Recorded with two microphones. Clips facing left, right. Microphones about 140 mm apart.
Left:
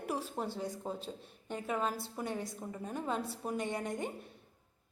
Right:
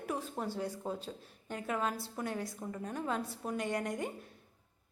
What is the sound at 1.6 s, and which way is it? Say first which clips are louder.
A woman's voice: even; 5° left (ahead or behind).